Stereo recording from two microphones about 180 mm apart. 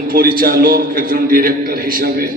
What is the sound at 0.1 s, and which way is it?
A man's voice, 55° right (ahead or behind).